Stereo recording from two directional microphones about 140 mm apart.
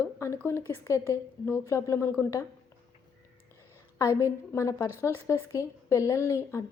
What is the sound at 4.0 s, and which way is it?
A woman's voice, 20° left (ahead or behind).